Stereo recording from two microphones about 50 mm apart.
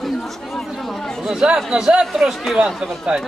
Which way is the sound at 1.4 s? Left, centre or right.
Centre.